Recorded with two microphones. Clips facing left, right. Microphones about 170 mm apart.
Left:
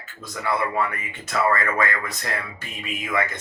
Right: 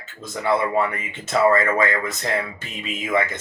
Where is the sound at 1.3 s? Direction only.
25° right (ahead or behind).